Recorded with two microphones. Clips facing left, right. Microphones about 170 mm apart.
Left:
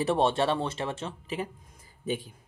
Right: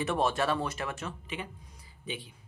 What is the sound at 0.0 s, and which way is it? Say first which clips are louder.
Speech: left 4 dB; 30° left (ahead or behind).